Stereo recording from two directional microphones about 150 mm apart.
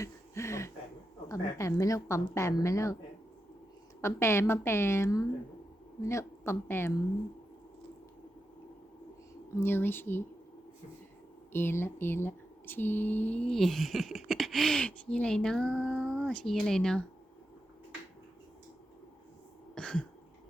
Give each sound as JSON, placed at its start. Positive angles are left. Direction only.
{"t": 0.0, "sound": "a sound", "side_deg": 20}
{"t": 1.3, "sound": "a woman's voice", "side_deg": 20}
{"t": 4.0, "sound": "a woman's voice", "side_deg": 15}
{"t": 9.6, "sound": "a woman's voice", "side_deg": 15}
{"t": 11.5, "sound": "speech", "side_deg": 15}
{"t": 19.7, "sound": "a sound", "side_deg": 5}